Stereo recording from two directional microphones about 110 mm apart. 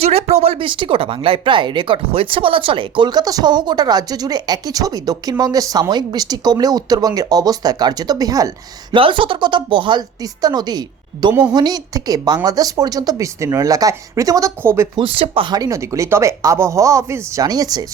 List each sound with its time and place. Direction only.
0.0 s speech: 70° right (ahead or behind); by 9.0 s 30° right (ahead or behind)
9.0 s a woman's voice: 50° right (ahead or behind); by 14.8 s 25° right (ahead or behind)
14.9 s speech: 55° right (ahead or behind)
15.5 s speech: 30° right (ahead or behind)